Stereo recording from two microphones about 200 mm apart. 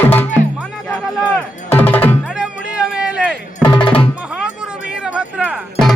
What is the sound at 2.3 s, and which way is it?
Music, 5° right (ahead or behind).